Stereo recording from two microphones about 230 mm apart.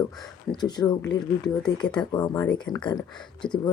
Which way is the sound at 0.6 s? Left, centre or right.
Centre.